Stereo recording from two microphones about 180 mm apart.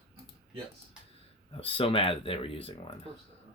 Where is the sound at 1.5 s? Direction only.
30° left (ahead or behind).